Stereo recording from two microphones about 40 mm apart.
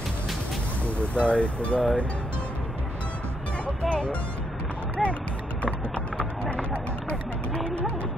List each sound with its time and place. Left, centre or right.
1.1 s speech: left
3.8 s speech: left
5.0 s speech: centre
5.6 s clip-clop: left